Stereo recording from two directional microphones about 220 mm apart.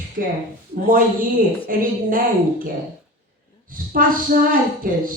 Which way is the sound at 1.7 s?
40° right (ahead or behind).